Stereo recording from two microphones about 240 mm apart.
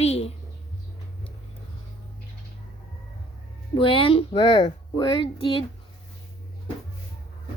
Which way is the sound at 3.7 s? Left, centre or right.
Left.